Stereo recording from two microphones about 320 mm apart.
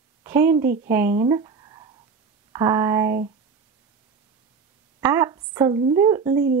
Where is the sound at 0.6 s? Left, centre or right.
Right.